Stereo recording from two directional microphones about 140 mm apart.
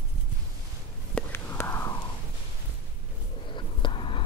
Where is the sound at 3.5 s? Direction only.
35° left (ahead or behind).